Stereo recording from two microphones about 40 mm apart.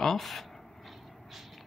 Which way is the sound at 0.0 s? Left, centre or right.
Centre.